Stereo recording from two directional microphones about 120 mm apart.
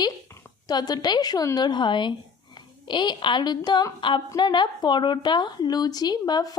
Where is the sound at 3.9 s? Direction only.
45° left (ahead or behind).